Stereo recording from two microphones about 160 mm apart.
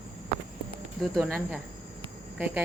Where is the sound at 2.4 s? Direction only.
10° right (ahead or behind).